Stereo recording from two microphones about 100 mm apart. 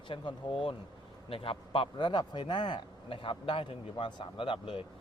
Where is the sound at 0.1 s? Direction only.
60° left (ahead or behind).